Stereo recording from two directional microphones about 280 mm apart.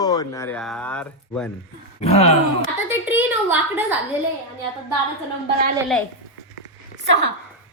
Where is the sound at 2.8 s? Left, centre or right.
Centre.